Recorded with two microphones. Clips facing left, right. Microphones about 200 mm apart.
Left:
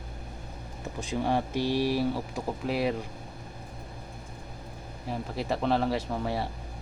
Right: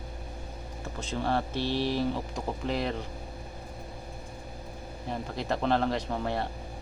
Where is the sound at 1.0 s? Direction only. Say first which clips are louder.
Left 2 dB; 15° left (ahead or behind).